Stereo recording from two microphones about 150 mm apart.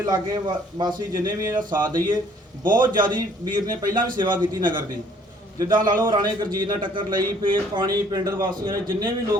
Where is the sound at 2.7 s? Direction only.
30° right (ahead or behind).